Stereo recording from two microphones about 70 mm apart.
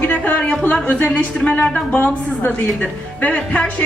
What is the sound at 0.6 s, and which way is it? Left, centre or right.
A woman's voice, left.